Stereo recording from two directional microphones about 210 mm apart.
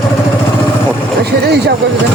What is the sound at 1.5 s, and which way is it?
Speech, 50° right (ahead or behind).